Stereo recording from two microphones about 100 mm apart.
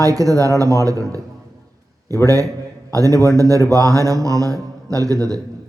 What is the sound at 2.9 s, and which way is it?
Speech, 35° right (ahead or behind).